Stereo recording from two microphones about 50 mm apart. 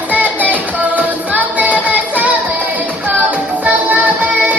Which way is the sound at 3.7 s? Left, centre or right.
Right.